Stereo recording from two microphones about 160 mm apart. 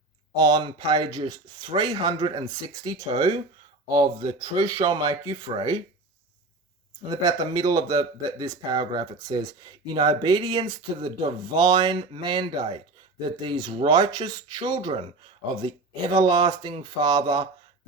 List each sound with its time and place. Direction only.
0.3 s speech: 25° right (ahead or behind)
3.9 s speech: 25° right (ahead or behind)
7.1 s speech: 25° right (ahead or behind)